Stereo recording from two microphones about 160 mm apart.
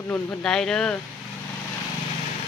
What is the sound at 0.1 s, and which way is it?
Speech, 5° left (ahead or behind).